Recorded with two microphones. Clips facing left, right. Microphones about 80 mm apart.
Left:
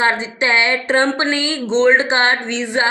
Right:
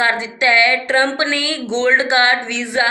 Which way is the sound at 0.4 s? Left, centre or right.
Left.